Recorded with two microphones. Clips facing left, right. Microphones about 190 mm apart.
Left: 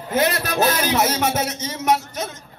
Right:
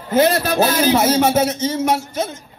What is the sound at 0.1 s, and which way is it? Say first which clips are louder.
A man's voice: right 6 dB; 30° right (ahead or behind).